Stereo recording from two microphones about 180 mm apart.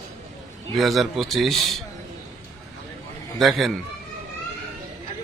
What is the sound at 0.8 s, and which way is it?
Speech, centre (ahead or behind).